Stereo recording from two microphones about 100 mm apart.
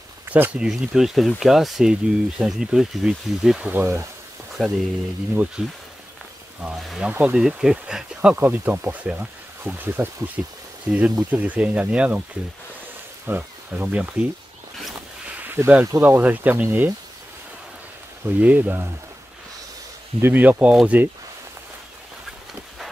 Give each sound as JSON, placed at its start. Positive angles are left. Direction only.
{"t": 0.3, "sound": "speech", "side_deg": -15}
{"t": 3.7, "sound": "speech", "side_deg": -25}
{"t": 4.6, "sound": "speech", "side_deg": 0}
{"t": 8.4, "sound": "speech", "side_deg": -20}
{"t": 13.3, "sound": "speech", "side_deg": -15}
{"t": 15.4, "sound": "speech", "side_deg": -20}
{"t": 18.2, "sound": "speech", "side_deg": -15}
{"t": 20.2, "sound": "speech", "side_deg": -20}